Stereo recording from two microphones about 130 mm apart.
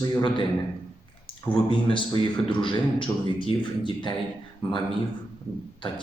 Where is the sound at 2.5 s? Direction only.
40° left (ahead or behind).